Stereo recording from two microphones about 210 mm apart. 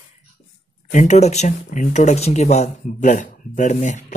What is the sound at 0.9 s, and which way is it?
Speech, 35° left (ahead or behind).